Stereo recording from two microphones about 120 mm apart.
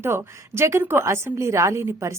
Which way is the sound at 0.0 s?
20° right (ahead or behind).